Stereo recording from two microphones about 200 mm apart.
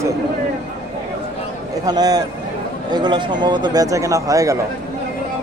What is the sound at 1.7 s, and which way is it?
A man's voice, 20° right (ahead or behind).